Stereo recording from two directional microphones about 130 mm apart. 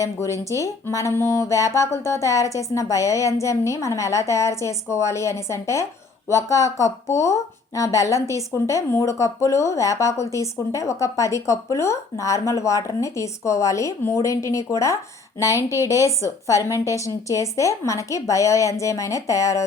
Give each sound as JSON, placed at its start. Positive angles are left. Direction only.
{"t": 0.0, "sound": "a woman's voice", "side_deg": 25}